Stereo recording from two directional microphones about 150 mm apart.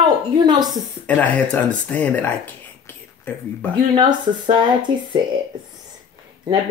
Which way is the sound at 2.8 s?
10° left (ahead or behind).